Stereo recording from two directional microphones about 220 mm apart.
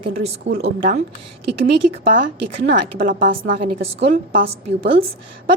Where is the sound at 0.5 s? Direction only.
55° right (ahead or behind).